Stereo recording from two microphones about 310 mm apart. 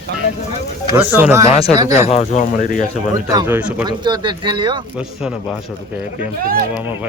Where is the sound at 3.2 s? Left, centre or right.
Centre.